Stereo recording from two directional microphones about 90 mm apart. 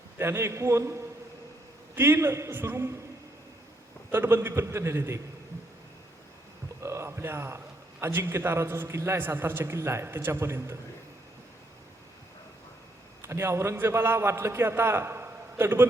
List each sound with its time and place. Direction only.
0.2 s a man's voice: 25° right (ahead or behind)
4.1 s a man's voice: 25° right (ahead or behind)
6.8 s a sound: 30° right (ahead or behind)
8.0 s a man's voice: 25° right (ahead or behind)
13.2 s a man's voice: 30° right (ahead or behind)